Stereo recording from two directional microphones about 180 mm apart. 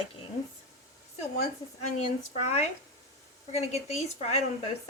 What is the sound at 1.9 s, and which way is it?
A woman's voice, 40° left (ahead or behind).